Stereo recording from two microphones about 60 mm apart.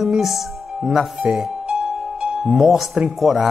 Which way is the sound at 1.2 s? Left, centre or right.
Centre.